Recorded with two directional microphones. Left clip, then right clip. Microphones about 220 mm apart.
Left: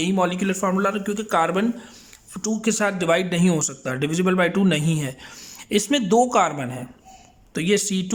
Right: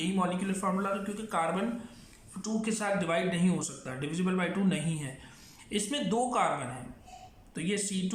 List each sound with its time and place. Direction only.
0.0 s a man's voice: 45° left (ahead or behind)